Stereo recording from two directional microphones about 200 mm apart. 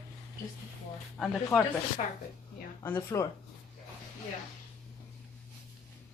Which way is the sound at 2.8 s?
15° left (ahead or behind).